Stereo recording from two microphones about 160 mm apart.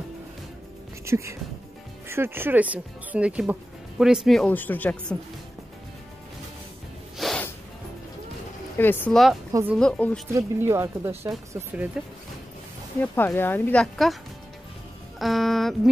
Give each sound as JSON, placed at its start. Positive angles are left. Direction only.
{"t": 1.0, "sound": "music", "side_deg": -20}
{"t": 2.0, "sound": "speech", "side_deg": -15}
{"t": 7.2, "sound": "snort", "side_deg": 0}
{"t": 8.7, "sound": "speech", "side_deg": 10}
{"t": 9.5, "sound": "speech", "side_deg": -15}
{"t": 9.8, "sound": "speech", "side_deg": 5}
{"t": 10.3, "sound": "speech", "side_deg": -15}
{"t": 13.0, "sound": "speech", "side_deg": 10}
{"t": 15.1, "sound": "music", "side_deg": 0}